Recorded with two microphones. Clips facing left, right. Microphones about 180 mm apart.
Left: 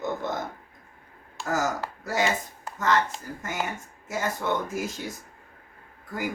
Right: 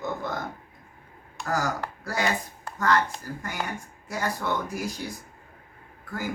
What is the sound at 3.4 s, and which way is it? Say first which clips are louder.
Speech: left 3 dB; 20° left (ahead or behind).